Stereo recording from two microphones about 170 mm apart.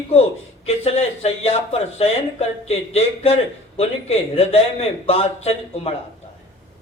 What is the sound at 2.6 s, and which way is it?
A man's voice, 40° left (ahead or behind).